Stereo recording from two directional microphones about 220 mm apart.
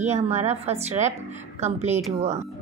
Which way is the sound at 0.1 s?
30° right (ahead or behind).